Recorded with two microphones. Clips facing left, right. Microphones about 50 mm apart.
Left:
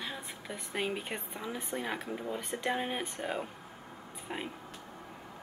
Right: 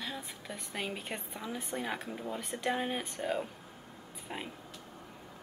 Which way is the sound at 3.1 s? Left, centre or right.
Centre.